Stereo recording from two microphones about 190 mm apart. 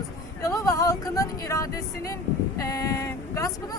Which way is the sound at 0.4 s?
15° left (ahead or behind).